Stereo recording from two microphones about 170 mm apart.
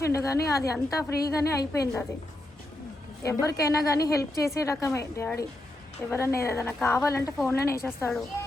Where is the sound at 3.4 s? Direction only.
20° left (ahead or behind).